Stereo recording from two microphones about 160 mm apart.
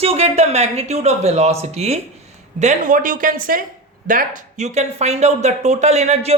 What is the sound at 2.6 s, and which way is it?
Speech, 50° right (ahead or behind).